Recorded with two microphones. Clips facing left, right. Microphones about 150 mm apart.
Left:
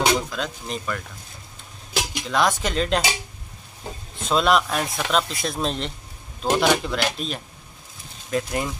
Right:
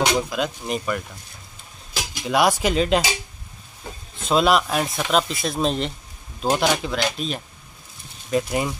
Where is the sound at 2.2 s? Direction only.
10° right (ahead or behind).